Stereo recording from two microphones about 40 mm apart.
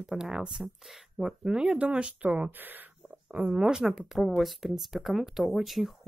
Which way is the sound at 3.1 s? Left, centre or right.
Right.